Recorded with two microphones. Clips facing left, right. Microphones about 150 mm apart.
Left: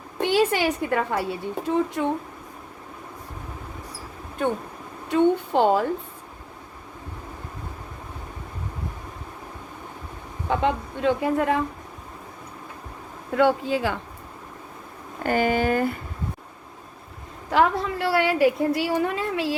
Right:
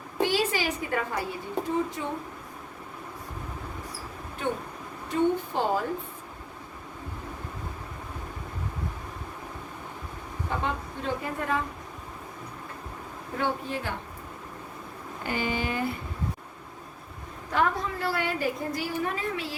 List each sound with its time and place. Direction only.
0.2 s a woman's voice: 60° left (ahead or behind)
5.0 s speech: 75° left (ahead or behind)
10.5 s a woman's voice: 90° left
13.3 s a woman's voice: 90° left
15.2 s speech: 50° left (ahead or behind)
17.5 s a woman's voice: 85° left